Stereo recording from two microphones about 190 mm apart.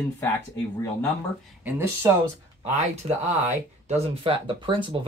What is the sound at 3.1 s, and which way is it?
Speech, 35° right (ahead or behind).